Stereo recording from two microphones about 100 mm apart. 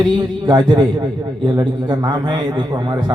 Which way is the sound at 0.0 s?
45° right (ahead or behind).